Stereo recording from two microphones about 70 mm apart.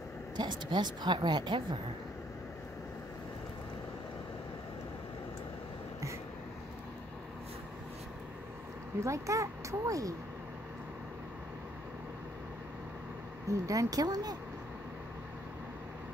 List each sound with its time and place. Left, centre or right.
0.4 s speech: right
9.0 s speech: right
13.5 s speech: right